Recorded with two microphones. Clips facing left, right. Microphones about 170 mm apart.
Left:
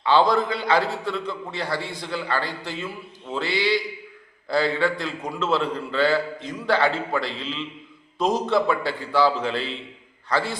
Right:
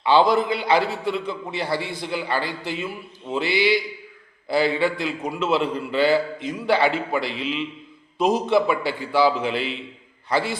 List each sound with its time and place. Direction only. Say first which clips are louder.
0.0 s a man's voice: right 2 dB; 15° right (ahead or behind)